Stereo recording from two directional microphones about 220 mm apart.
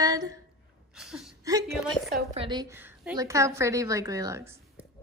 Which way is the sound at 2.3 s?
20° right (ahead or behind).